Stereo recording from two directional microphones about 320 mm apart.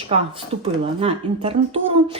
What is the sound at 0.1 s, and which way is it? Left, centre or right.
A woman's voice, centre.